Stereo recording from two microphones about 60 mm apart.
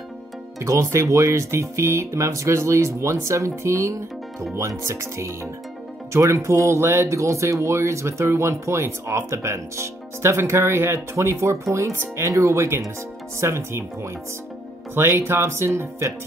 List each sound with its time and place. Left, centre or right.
0.6 s speech: right